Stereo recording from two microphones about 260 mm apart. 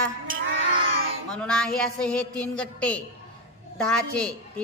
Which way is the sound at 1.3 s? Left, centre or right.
Centre.